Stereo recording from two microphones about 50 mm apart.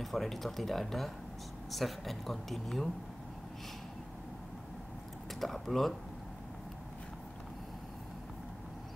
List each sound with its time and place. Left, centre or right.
0.0 s speech: centre
5.3 s speech: centre